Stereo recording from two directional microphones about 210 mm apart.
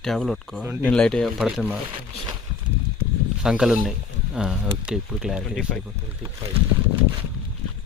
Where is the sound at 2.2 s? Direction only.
20° right (ahead or behind).